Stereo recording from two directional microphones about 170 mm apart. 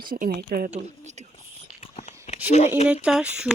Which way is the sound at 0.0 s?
60° right (ahead or behind).